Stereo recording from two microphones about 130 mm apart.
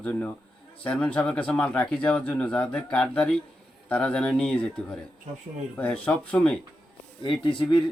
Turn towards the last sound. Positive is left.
turn(degrees=40)  # may be behind; listen again after turning